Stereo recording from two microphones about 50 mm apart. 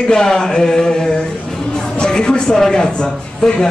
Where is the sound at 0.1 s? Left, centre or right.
Centre.